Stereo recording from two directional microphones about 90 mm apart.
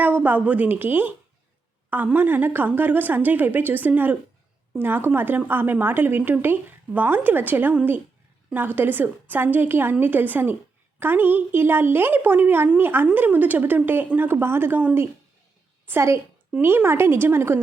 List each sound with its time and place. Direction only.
0.0 s a woman's voice: 15° right (ahead or behind)